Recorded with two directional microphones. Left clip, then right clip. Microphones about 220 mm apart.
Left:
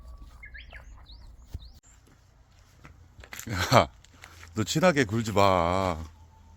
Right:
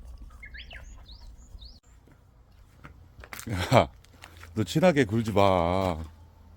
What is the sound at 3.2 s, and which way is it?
Speech, 5° right (ahead or behind).